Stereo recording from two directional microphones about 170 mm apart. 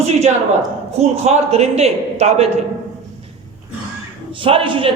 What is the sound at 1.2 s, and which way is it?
A man's voice, 40° right (ahead or behind).